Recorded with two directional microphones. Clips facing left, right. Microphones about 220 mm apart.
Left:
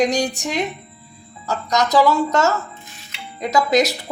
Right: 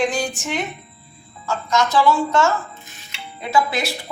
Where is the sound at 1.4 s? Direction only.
40° left (ahead or behind).